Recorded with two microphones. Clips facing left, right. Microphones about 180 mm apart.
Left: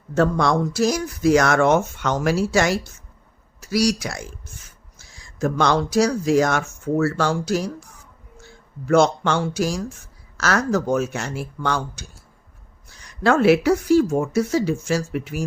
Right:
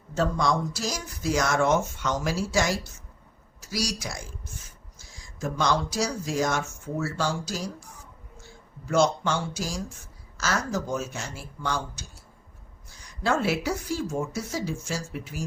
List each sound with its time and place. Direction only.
0.1 s speech: 60° left (ahead or behind)
8.9 s speech: 65° left (ahead or behind)